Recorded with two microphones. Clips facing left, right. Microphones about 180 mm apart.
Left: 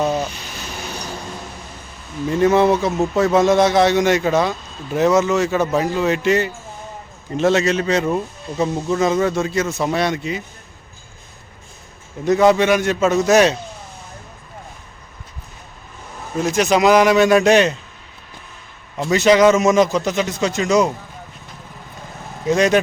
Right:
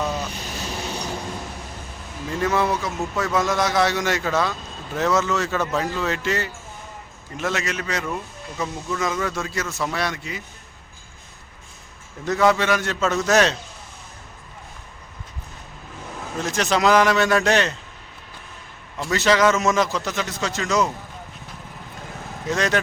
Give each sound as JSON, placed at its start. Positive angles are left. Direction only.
{"t": 0.9, "sound": "a sound", "side_deg": -25}
{"t": 2.3, "sound": "a man's voice", "side_deg": 25}
{"t": 7.3, "sound": "speech", "side_deg": 30}
{"t": 12.2, "sound": "a man's voice", "side_deg": 20}
{"t": 16.4, "sound": "a man's voice", "side_deg": 10}
{"t": 18.9, "sound": "a man's voice", "side_deg": 20}
{"t": 22.4, "sound": "a man's voice", "side_deg": 15}